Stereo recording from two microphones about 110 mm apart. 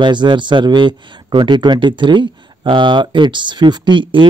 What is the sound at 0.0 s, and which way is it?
Speech, 45° right (ahead or behind).